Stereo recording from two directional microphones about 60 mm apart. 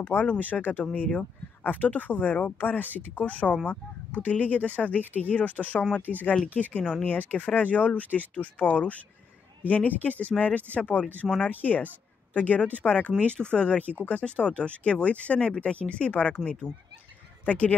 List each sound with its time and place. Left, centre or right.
0.0 s speech: left
6.1 s speech: right
6.5 s speech: left